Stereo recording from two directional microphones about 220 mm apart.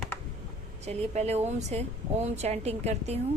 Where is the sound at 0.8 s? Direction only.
30° right (ahead or behind).